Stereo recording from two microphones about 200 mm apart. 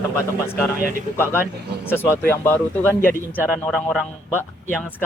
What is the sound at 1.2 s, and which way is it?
Speech, 10° left (ahead or behind).